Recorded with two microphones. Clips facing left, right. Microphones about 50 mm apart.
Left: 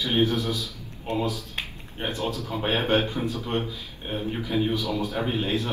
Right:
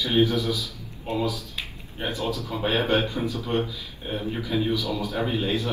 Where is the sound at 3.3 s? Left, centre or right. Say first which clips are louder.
Right 1 dB; left.